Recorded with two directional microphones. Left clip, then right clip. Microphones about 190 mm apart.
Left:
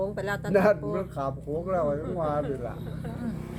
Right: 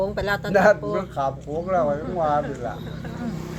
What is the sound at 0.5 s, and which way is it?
Speech, 25° left (ahead or behind).